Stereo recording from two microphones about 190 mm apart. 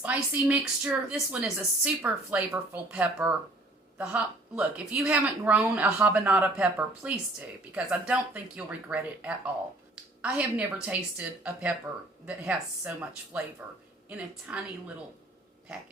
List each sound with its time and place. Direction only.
0.0 s a woman's voice: 5° right (ahead or behind)